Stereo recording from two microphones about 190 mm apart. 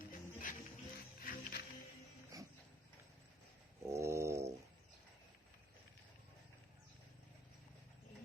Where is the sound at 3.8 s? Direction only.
15° right (ahead or behind).